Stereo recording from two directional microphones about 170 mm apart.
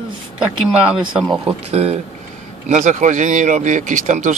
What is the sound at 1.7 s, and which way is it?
Speech, 40° right (ahead or behind).